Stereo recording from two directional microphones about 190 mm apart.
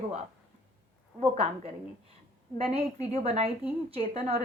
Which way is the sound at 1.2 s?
30° right (ahead or behind).